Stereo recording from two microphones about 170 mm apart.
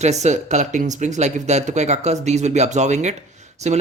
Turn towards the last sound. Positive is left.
turn(degrees=-40)  # may be behind; listen again after turning